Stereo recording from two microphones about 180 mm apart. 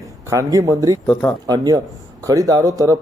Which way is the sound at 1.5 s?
20° right (ahead or behind).